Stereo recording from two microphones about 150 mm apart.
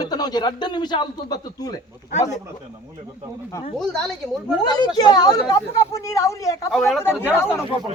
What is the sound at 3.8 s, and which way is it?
Speech, 5° left (ahead or behind).